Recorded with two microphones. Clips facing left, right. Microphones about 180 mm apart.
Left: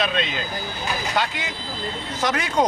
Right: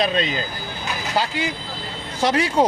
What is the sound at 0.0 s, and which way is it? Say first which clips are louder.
Speech: right 3 dB; 40° right (ahead or behind).